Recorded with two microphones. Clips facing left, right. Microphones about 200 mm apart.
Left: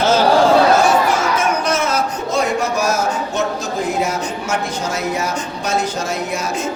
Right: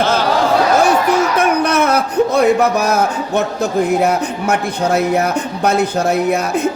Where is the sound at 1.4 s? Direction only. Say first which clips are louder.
Right 4 dB; 60° right (ahead or behind).